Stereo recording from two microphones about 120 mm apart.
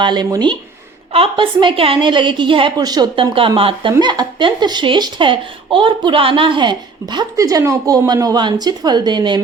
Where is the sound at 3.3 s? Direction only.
50° right (ahead or behind).